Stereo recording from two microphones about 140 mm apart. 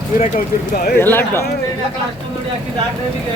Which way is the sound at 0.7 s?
90° left.